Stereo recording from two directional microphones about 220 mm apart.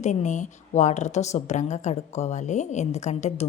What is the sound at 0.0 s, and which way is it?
A woman's voice, 30° left (ahead or behind).